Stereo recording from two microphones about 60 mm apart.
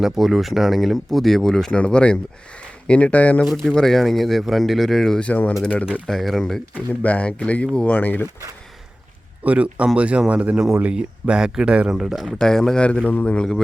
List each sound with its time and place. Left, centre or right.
0.0 s a man's voice: centre; by 3.4 s left
3.6 s speech: centre
5.2 s a man's voice: left
6.1 s speech: centre
7.0 s a man's voice: left
9.4 s speech: right; by 12.4 s centre
12.4 s a man's voice: centre